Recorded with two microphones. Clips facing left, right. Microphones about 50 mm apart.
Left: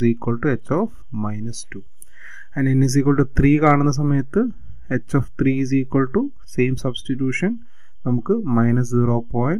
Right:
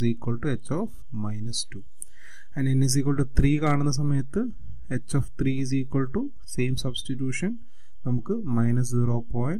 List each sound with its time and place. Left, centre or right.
0.0 s speech: left